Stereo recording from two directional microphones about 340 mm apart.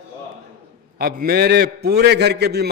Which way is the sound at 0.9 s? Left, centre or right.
Right.